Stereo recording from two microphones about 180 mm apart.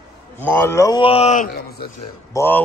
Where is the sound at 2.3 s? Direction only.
10° left (ahead or behind).